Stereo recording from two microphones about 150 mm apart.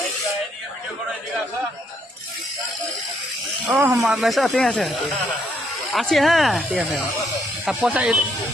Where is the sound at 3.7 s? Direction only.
10° right (ahead or behind).